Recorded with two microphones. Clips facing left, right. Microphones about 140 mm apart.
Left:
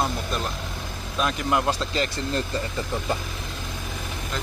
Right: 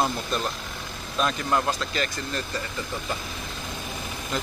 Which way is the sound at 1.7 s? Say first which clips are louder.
Left 2 dB; 25° left (ahead or behind).